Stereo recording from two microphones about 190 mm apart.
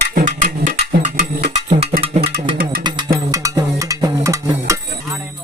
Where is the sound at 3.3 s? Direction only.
15° right (ahead or behind).